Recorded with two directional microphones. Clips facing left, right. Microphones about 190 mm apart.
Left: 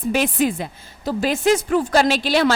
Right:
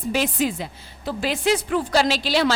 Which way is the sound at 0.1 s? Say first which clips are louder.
Left 3 dB; 55° left (ahead or behind).